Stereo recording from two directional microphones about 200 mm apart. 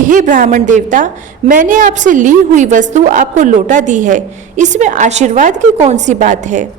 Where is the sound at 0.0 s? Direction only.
40° right (ahead or behind).